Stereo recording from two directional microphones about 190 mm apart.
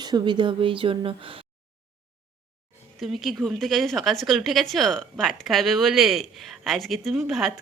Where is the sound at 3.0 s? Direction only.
Centre (ahead or behind).